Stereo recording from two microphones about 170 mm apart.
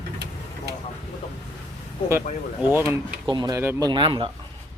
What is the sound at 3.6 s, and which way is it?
Speech, 15° right (ahead or behind).